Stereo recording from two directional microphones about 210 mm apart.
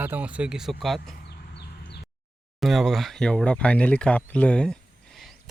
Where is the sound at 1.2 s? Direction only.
50° left (ahead or behind).